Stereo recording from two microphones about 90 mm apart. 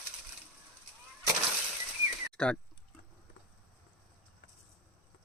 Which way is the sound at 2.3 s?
15° left (ahead or behind).